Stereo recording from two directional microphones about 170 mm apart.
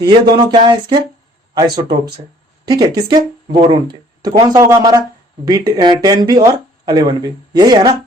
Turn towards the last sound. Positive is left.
turn(degrees=-25)  # may be behind; listen again after turning